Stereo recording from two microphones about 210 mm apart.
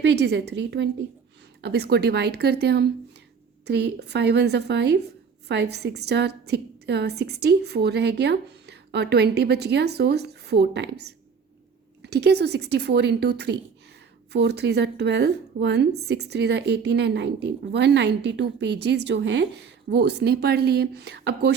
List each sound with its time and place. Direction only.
0.0 s a woman's voice: 55° right (ahead or behind)
12.0 s a woman's voice: 50° right (ahead or behind)